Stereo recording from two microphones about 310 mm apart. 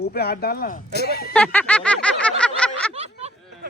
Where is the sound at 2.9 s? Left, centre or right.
Centre.